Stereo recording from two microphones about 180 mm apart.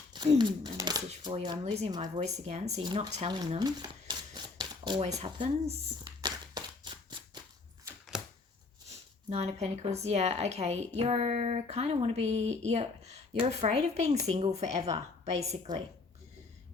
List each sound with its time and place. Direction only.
0.3 s speech: 25° right (ahead or behind)
1.6 s speech: 35° right (ahead or behind)
2.8 s speech: 25° right (ahead or behind)
3.2 s a sound: 30° right (ahead or behind)
5.0 s speech: 40° right (ahead or behind)
6.2 s a sound: 25° right (ahead or behind)
8.1 s chopping: 5° right (ahead or behind)
8.9 s speech: 35° right (ahead or behind)